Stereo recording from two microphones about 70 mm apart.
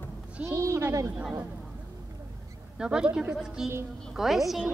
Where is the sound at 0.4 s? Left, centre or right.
Right.